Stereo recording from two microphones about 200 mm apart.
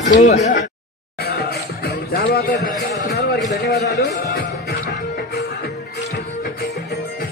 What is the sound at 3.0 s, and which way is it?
A man's voice, 55° left (ahead or behind).